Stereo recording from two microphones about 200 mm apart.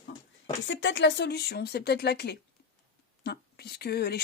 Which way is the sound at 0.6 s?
65° left (ahead or behind).